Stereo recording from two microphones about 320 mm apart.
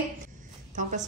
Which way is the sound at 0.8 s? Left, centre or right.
Right.